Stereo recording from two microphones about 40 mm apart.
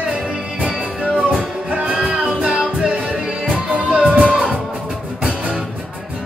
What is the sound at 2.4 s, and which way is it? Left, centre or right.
Music, right.